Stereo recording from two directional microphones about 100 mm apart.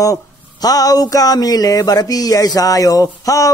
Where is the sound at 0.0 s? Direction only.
35° left (ahead or behind).